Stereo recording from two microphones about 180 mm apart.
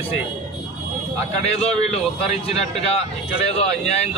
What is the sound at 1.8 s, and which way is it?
Speech, 35° left (ahead or behind).